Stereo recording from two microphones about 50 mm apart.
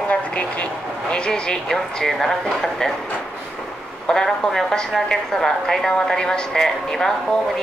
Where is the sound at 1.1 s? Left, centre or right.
Centre.